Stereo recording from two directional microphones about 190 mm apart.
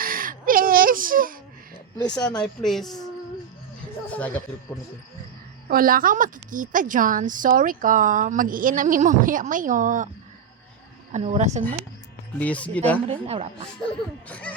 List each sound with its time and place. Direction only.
0.0 s baby cry: 50° right (ahead or behind)
2.0 s speech: 20° left (ahead or behind)
2.6 s speech: centre (ahead or behind)
5.6 s a woman's voice: 50° right (ahead or behind)
11.1 s speech: 35° right (ahead or behind)
12.4 s speech: 5° left (ahead or behind)
13.1 s speech: 30° right (ahead or behind)
14.3 s speech: 5° left (ahead or behind)